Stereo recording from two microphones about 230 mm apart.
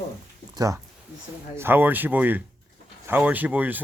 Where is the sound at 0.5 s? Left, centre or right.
Centre.